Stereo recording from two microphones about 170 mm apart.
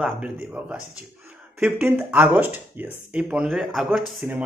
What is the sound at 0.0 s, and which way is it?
Speech, 5° right (ahead or behind).